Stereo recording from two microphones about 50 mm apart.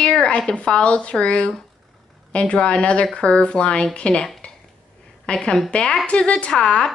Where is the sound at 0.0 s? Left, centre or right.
Centre.